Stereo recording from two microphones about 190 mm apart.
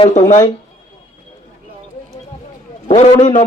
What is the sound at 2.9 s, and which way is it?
Speech, 35° left (ahead or behind).